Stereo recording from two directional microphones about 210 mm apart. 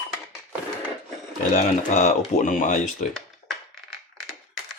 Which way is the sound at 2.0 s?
40° left (ahead or behind).